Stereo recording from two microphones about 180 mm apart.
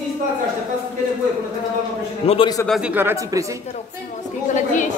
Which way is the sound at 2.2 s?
35° left (ahead or behind).